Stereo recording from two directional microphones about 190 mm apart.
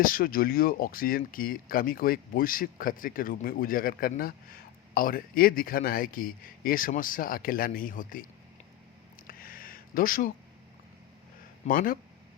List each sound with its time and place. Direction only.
0.0 s speech: 50° left (ahead or behind)
9.2 s a sound: 50° left (ahead or behind)
11.6 s speech: 45° left (ahead or behind)